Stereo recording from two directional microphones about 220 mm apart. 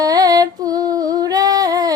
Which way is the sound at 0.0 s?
15° right (ahead or behind).